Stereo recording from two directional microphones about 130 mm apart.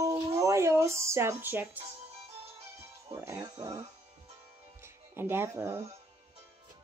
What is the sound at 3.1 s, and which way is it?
Speech, 20° right (ahead or behind).